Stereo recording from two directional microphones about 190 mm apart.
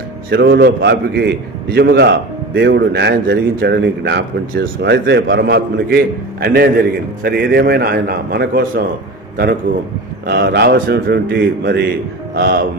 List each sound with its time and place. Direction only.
0.3 s a man's voice: 70° right (ahead or behind); by 8.8 s 55° right (ahead or behind)
10.2 s a man's voice: 60° right (ahead or behind)